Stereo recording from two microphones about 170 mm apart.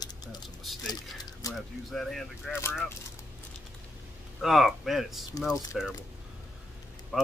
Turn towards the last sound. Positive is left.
turn(degrees=-5)  # may be behind; listen again after turning